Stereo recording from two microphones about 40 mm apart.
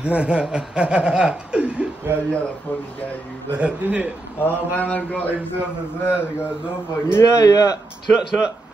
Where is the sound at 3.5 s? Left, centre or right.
Right.